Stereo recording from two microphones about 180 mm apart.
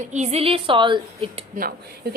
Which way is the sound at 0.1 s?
35° right (ahead or behind).